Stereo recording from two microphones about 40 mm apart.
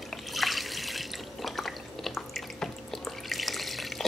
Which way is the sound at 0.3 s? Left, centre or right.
Centre.